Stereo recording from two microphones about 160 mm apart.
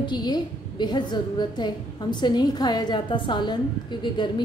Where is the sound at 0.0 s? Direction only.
25° left (ahead or behind).